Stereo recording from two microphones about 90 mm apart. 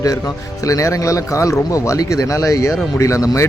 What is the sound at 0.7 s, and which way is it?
Speech, 40° left (ahead or behind).